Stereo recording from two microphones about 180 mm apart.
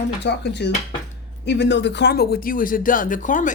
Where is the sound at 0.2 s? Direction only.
70° left (ahead or behind).